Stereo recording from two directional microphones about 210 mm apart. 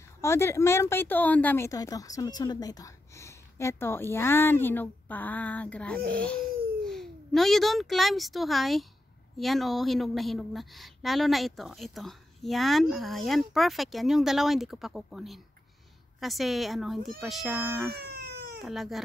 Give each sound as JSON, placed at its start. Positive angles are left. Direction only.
{"t": 0.2, "sound": "a child's voice", "side_deg": 10}
{"t": 18.0, "sound": "baby cry", "side_deg": -50}
{"t": 18.6, "sound": "a woman's voice", "side_deg": 0}